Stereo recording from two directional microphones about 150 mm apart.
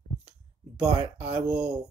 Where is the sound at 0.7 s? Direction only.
10° right (ahead or behind).